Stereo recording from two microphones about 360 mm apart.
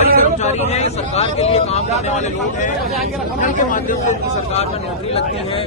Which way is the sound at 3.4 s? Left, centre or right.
Left.